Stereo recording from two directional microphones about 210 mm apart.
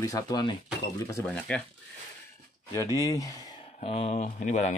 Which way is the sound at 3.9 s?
30° left (ahead or behind).